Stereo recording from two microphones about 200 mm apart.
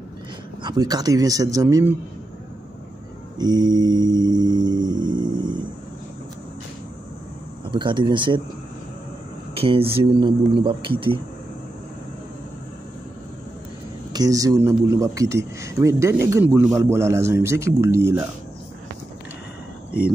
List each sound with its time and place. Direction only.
0.6 s speech: 20° right (ahead or behind)
3.3 s mantra: 20° right (ahead or behind)
7.7 s mantra: 25° right (ahead or behind)
9.6 s mantra: 30° right (ahead or behind)
14.1 s speech: 15° right (ahead or behind)